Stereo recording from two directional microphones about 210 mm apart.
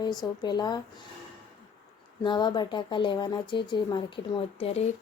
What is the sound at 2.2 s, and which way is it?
Speech, 20° left (ahead or behind).